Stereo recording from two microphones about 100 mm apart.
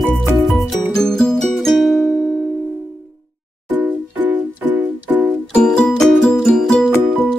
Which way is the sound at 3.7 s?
15° right (ahead or behind).